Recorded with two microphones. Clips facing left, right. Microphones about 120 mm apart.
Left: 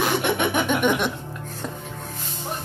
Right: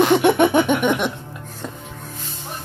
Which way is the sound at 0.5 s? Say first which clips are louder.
Right 4 dB; 20° right (ahead or behind).